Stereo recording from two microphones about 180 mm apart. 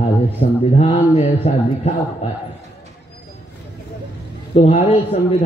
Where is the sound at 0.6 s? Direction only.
35° left (ahead or behind).